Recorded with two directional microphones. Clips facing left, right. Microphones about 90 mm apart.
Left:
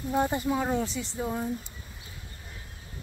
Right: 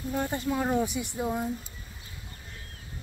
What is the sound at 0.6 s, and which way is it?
Speech, 5° right (ahead or behind).